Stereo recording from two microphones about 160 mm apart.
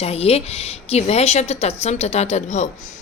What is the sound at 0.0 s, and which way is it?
A woman's voice, 40° left (ahead or behind).